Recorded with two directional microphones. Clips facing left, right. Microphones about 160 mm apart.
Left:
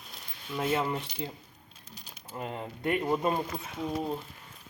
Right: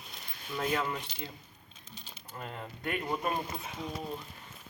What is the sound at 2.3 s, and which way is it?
Speech, 25° left (ahead or behind).